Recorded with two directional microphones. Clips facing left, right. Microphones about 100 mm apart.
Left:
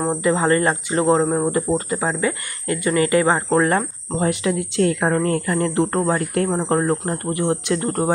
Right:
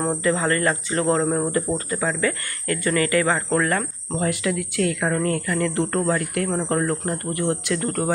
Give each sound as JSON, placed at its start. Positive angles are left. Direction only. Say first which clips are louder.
{"t": 0.1, "sound": "speech", "louder": "left 6 dB", "side_deg": 20}